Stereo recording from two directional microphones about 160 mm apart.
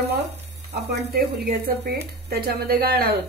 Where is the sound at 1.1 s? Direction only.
75° right (ahead or behind).